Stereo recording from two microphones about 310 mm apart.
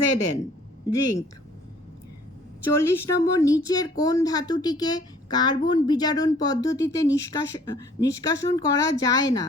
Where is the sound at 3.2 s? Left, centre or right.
Centre.